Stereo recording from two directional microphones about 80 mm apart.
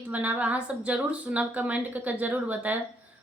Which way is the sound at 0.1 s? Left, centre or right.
Centre.